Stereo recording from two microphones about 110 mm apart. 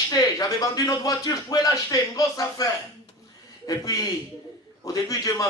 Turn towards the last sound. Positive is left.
turn(degrees=30)  # may be behind; listen again after turning